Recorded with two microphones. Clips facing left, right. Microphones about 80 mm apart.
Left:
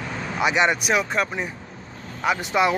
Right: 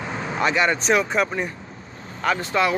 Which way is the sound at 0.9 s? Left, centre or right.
Centre.